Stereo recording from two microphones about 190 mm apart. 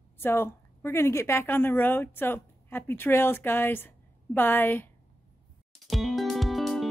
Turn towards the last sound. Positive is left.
turn(degrees=0)  # may be behind; listen again after turning